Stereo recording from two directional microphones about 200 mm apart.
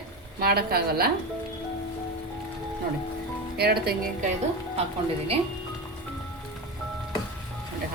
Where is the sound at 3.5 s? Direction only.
50° right (ahead or behind).